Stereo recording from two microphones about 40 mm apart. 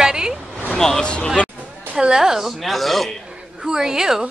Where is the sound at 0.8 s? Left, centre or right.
Centre.